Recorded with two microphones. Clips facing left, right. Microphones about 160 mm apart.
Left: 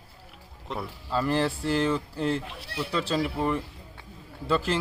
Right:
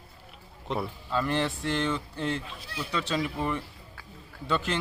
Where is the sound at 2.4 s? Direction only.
65° left (ahead or behind).